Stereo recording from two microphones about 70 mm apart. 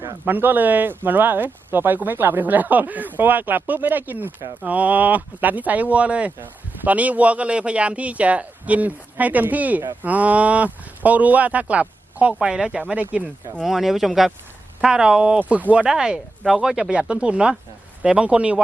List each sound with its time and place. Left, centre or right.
0.3 s speech: right
13.7 s speech: centre